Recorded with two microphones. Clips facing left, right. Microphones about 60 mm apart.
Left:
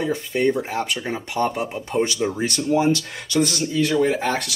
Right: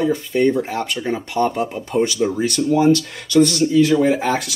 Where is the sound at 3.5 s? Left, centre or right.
Centre.